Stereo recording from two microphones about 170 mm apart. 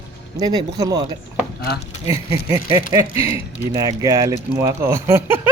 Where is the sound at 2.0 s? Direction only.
20° right (ahead or behind).